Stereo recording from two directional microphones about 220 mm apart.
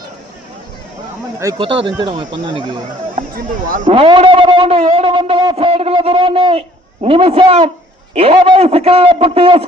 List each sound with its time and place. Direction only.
1.4 s a man's voice: 20° right (ahead or behind)
3.2 s speech: 40° right (ahead or behind)
3.8 s a man's voice: 25° right (ahead or behind)